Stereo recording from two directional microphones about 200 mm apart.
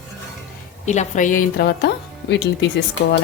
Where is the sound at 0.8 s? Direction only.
35° left (ahead or behind); by 1.9 s 50° left (ahead or behind).